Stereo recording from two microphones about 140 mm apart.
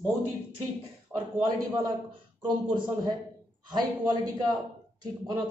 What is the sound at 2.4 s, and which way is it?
Speech, 35° right (ahead or behind).